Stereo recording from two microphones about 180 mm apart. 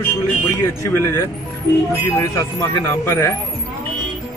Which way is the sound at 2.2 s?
15° left (ahead or behind).